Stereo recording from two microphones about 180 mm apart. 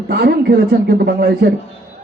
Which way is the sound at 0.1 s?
65° right (ahead or behind).